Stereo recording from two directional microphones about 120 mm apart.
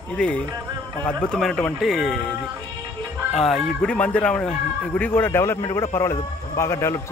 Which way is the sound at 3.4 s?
Centre (ahead or behind).